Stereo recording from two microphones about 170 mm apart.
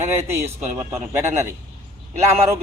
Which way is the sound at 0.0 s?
15° right (ahead or behind).